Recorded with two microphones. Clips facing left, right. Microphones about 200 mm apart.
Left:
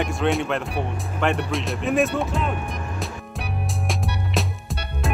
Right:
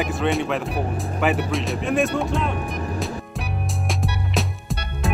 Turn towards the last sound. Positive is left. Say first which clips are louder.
# right 2 dB
turn(degrees=0)  # may be behind; listen again after turning